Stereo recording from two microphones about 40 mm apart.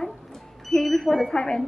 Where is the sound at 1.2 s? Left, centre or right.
Centre.